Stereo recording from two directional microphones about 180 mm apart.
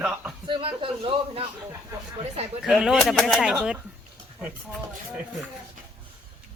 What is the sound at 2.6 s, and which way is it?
Speech, centre (ahead or behind).